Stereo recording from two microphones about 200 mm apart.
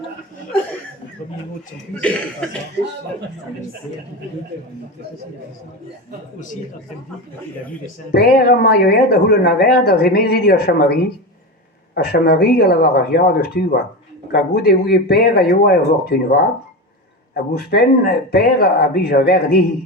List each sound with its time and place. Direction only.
2.0 s speech: 5° left (ahead or behind)
8.1 s speech: 50° left (ahead or behind)
12.1 s speech: 55° left (ahead or behind)